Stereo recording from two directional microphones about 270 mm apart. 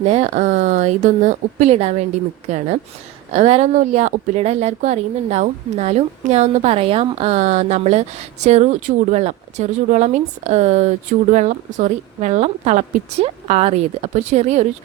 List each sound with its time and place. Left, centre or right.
0.0 s speech: right